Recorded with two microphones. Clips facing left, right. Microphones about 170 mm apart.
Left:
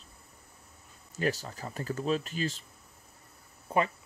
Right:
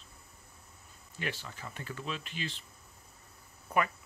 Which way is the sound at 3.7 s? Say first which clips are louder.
Left 3 dB; 25° left (ahead or behind).